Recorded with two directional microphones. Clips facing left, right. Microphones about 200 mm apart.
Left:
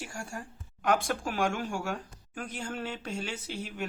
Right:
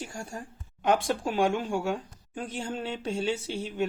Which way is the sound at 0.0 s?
20° right (ahead or behind).